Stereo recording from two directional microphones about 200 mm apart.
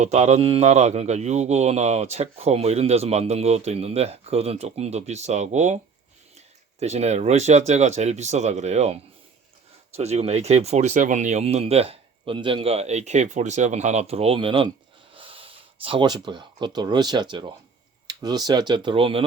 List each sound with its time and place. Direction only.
0.0 s speech: 35° right (ahead or behind)